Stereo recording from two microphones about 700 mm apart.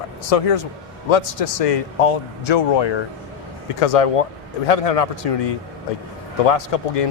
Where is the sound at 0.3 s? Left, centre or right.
Left.